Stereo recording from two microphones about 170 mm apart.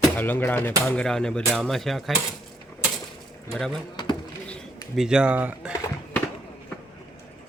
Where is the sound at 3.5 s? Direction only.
5° left (ahead or behind).